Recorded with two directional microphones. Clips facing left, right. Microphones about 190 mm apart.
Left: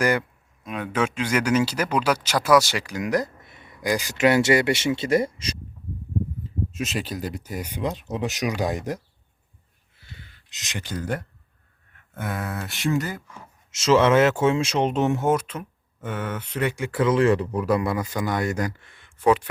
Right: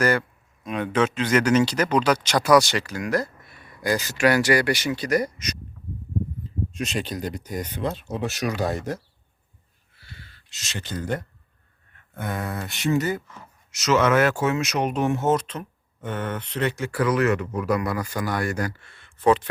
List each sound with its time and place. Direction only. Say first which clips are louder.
0.0 s speech: even; 15° left (ahead or behind)
0.6 s speech: right 3 dB; 5° left (ahead or behind); by 5.5 s 25° left (ahead or behind)
6.7 s speech: right 1 dB; 5° left (ahead or behind)
10.0 s a sound: even; 20° left (ahead or behind)
12.3 s speech: right 1 dB; centre (ahead or behind)
13.7 s speech: left 2 dB; 25° left (ahead or behind); by 19.5 s 10° left (ahead or behind)